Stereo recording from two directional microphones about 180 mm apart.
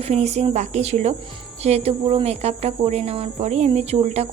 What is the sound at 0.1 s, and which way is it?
Cricket, 35° right (ahead or behind).